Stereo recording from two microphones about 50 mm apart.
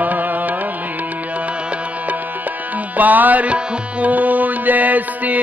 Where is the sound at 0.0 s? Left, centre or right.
Right.